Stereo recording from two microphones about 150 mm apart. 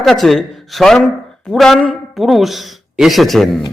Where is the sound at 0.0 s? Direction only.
Centre (ahead or behind).